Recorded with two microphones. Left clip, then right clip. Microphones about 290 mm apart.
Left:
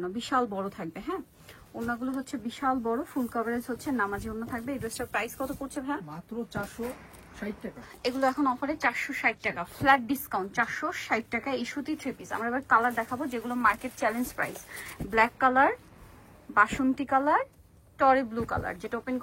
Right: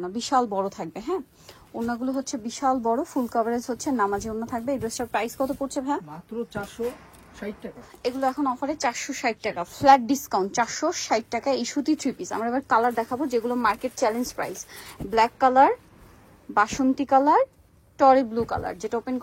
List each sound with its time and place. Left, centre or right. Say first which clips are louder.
0.0 s a woman's voice: right 5 dB; centre
6.1 s speech: right 4 dB; centre
8.2 s a woman's voice: right 1 dB; centre